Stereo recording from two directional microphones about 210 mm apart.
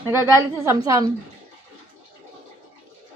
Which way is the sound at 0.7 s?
15° right (ahead or behind).